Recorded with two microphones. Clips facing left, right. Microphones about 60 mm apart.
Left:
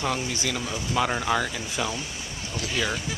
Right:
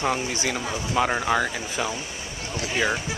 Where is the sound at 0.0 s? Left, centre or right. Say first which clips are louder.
Right 3 dB; right.